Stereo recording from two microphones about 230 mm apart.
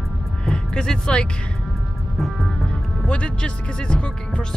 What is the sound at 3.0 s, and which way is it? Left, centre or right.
Speech, centre.